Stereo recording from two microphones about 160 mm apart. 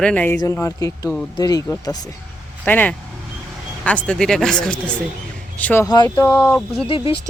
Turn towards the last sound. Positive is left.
turn(degrees=35)  # may be behind; listen again after turning